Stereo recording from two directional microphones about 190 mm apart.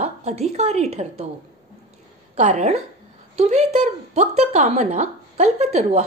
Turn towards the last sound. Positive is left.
turn(degrees=-35)  # may be behind; listen again after turning